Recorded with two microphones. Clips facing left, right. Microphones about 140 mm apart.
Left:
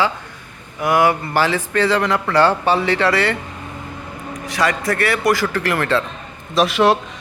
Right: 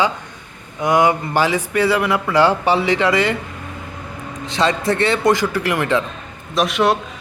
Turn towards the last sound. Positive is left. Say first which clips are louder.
# left 2 dB
turn(degrees=0)  # may be behind; listen again after turning